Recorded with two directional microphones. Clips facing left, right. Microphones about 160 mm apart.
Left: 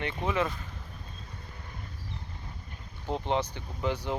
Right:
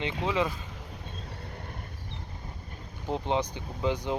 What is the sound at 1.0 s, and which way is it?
Vehicle, 65° right (ahead or behind).